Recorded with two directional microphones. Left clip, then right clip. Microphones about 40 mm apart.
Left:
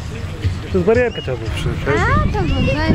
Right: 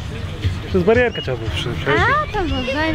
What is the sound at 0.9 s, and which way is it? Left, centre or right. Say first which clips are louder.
Speech: even; right.